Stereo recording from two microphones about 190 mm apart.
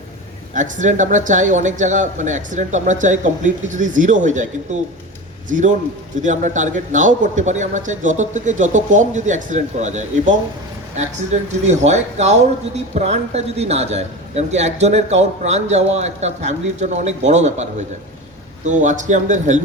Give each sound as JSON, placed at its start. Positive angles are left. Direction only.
{"t": 0.5, "sound": "speech", "side_deg": -40}